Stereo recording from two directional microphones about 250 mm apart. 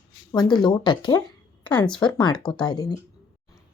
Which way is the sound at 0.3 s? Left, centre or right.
Centre.